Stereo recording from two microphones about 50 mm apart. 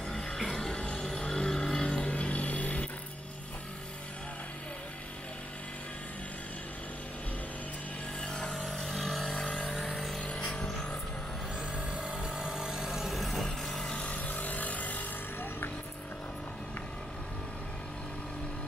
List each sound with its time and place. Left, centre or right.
0.1 s music: centre
2.1 s a sound: left
8.2 s music: centre
8.5 s vehicle: centre
10.2 s vehicle: left
11.9 s vehicle: centre
13.9 s vehicle: left